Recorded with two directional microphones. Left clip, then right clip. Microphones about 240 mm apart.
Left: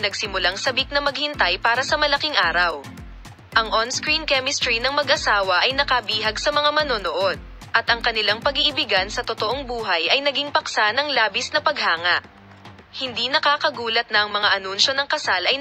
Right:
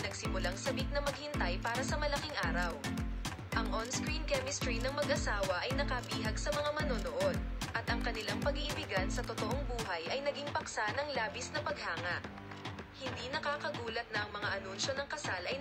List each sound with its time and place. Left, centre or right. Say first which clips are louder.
0.0 s speech: left 17 dB; left